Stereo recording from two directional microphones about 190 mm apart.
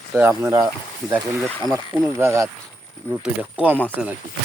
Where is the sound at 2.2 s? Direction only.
15° right (ahead or behind).